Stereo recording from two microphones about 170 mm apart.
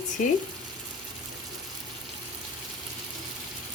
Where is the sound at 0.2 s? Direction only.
45° left (ahead or behind).